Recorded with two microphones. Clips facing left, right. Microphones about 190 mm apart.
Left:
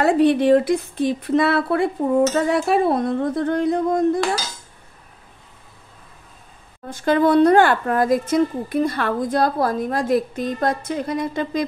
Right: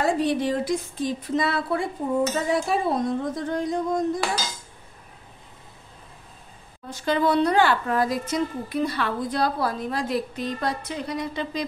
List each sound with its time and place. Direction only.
0.0 s speech: 65° left (ahead or behind)
6.9 s speech: 50° left (ahead or behind)